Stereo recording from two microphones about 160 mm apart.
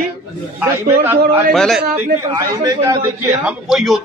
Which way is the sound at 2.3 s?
20° right (ahead or behind).